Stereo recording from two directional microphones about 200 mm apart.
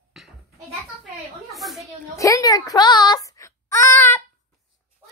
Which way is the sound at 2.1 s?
15° left (ahead or behind).